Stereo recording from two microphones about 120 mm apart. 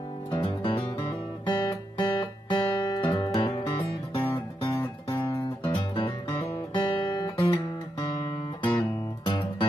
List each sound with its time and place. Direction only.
0.3 s music: 45° left (ahead or behind)
4.7 s guitar: 35° left (ahead or behind)
8.7 s music: 40° left (ahead or behind)